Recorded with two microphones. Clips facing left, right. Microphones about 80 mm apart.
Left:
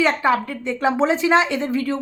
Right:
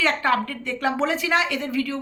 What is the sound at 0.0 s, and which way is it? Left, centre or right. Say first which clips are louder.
A woman's voice: left 3 dB; centre.